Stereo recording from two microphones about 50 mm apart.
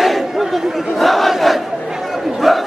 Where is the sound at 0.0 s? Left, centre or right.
Centre.